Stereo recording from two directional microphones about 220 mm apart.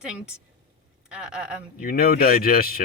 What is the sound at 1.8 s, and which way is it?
Speech, 40° left (ahead or behind).